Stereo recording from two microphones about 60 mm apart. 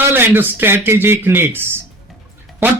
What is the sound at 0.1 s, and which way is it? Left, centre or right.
A man's voice, right.